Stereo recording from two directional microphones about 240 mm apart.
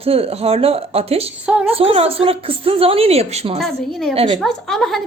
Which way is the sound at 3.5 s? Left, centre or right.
Centre.